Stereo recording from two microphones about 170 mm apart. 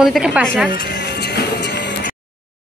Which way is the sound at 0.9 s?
90° left.